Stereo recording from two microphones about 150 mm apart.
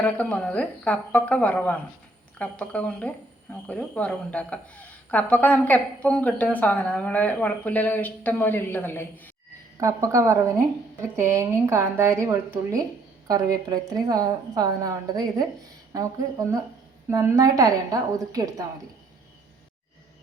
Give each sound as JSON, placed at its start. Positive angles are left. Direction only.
{"t": 0.0, "sound": "a woman's voice", "side_deg": 10}
{"t": 9.7, "sound": "a woman's voice", "side_deg": -20}